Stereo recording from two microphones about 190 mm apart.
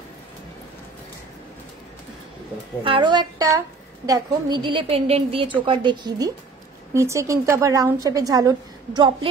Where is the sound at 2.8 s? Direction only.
25° right (ahead or behind).